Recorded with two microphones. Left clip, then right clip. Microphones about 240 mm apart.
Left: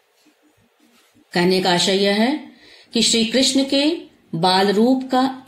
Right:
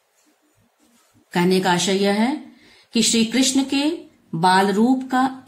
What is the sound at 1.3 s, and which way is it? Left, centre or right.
Speech, centre.